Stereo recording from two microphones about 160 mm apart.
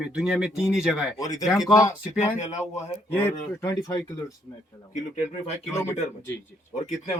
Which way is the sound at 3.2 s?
20° left (ahead or behind).